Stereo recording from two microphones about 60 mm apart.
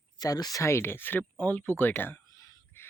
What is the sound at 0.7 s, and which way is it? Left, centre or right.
Speech, left.